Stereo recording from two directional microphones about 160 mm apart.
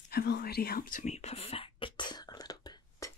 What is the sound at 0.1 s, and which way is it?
Whispering, 85° left.